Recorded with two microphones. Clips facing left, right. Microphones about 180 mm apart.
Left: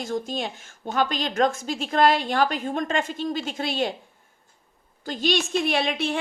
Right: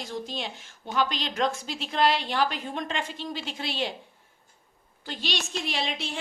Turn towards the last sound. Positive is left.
turn(degrees=60)  # may be behind; listen again after turning